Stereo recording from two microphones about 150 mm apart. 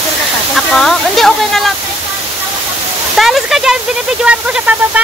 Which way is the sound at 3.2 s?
Centre (ahead or behind).